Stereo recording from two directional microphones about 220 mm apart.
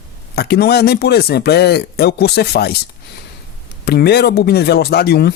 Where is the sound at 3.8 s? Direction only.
45° left (ahead or behind).